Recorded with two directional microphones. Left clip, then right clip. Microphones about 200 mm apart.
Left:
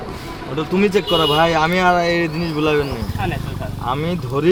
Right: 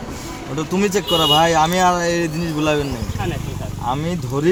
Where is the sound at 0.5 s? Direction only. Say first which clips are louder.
Left 2 dB; 30° right (ahead or behind).